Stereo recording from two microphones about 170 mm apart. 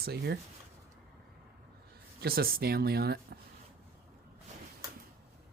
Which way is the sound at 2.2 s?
60° right (ahead or behind).